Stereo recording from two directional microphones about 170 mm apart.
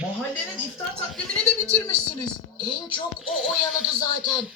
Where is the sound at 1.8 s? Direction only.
25° left (ahead or behind).